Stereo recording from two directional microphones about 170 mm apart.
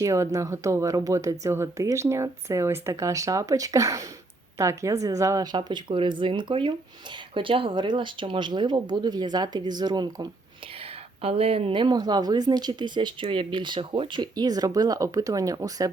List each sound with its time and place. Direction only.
0.0 s speech: 20° right (ahead or behind)
11.2 s speech: 35° right (ahead or behind)